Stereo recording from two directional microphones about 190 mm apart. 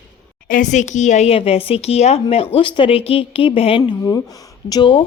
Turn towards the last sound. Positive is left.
turn(degrees=25)  # may be behind; listen again after turning